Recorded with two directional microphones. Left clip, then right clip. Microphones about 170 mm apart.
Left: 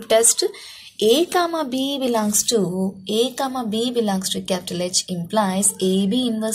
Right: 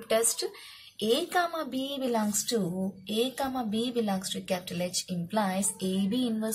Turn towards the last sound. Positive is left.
turn(degrees=20)  # may be behind; listen again after turning